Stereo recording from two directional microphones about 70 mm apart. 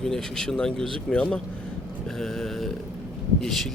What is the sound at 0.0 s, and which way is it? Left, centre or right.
A man's voice, centre.